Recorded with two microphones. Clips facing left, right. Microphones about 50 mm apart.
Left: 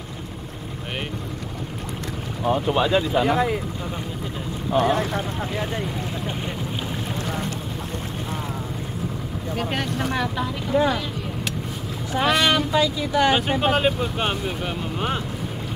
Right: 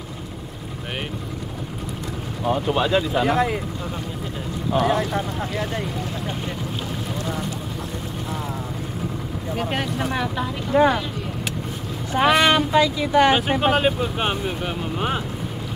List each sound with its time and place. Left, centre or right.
2.4 s speech: centre
4.8 s speech: centre
9.6 s speech: centre
10.7 s speech: right
12.3 s speech: centre
13.3 s speech: centre